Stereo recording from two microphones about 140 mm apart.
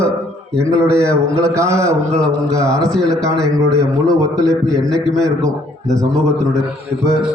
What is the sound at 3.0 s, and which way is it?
A man's voice, 25° right (ahead or behind).